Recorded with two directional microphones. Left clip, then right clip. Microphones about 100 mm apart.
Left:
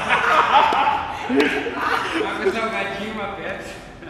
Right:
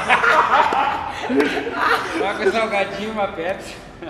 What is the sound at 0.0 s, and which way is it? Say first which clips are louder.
Snicker: right 2 dB; 20° right (ahead or behind).